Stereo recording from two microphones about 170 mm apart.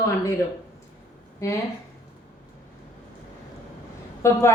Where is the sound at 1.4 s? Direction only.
20° left (ahead or behind).